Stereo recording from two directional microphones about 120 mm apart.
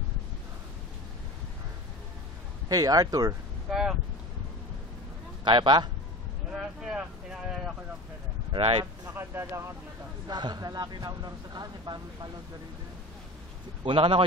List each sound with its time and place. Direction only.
2.7 s speech: 30° right (ahead or behind)
3.7 s speech: 5° right (ahead or behind)
5.4 s a man's voice: 40° right (ahead or behind)
6.5 s a sound: 5° right (ahead or behind)
8.5 s speech: 50° right (ahead or behind)
9.0 s speech: 20° right (ahead or behind)
10.2 s speech: 35° right (ahead or behind)
13.8 s speech: 45° right (ahead or behind)